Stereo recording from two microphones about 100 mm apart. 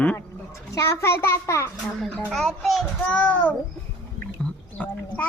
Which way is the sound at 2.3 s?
Centre (ahead or behind).